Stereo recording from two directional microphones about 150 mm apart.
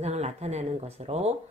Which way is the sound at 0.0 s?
45° right (ahead or behind).